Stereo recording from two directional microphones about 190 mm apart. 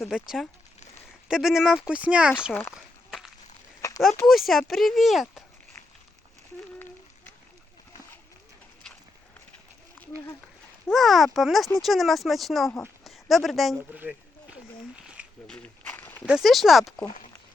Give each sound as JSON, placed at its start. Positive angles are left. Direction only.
{"t": 1.3, "sound": "speech", "side_deg": 0}
{"t": 2.5, "sound": "speech", "side_deg": 10}
{"t": 2.7, "sound": "a sound", "side_deg": 0}
{"t": 3.8, "sound": "a sound", "side_deg": 15}
{"t": 4.3, "sound": "speech", "side_deg": 0}
{"t": 10.9, "sound": "speech", "side_deg": 0}
{"t": 13.1, "sound": "a sound", "side_deg": 0}
{"t": 15.4, "sound": "walk", "side_deg": 5}
{"t": 16.2, "sound": "speech", "side_deg": 0}